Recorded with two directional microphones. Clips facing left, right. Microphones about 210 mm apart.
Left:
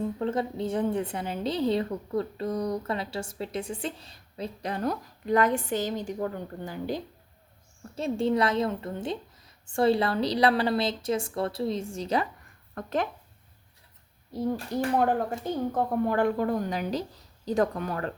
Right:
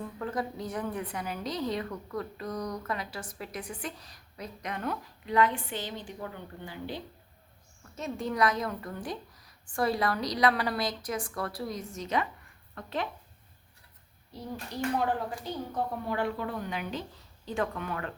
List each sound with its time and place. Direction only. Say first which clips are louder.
0.0 s a woman's voice: left 6 dB; 25° left (ahead or behind); by 7.0 s 45° left (ahead or behind)
7.9 s a woman's voice: left 6 dB; 30° left (ahead or behind)
12.7 s speech: left 5 dB; 45° left (ahead or behind)
15.4 s a woman's voice: left 6 dB; 50° left (ahead or behind)